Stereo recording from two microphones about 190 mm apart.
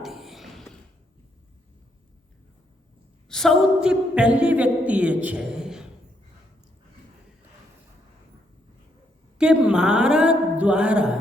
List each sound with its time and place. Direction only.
0.0 s a sound: centre (ahead or behind)
3.2 s speech: centre (ahead or behind)
9.4 s speech: 5° right (ahead or behind)